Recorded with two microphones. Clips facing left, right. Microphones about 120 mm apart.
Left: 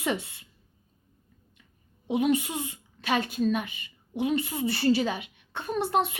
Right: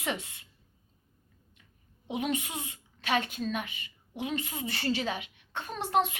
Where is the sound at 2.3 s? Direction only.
35° left (ahead or behind).